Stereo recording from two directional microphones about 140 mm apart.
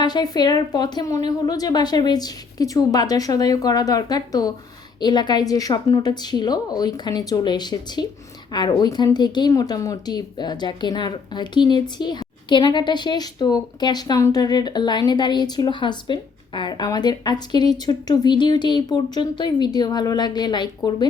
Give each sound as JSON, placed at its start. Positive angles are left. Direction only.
{"t": 0.0, "sound": "a woman's voice", "side_deg": 30}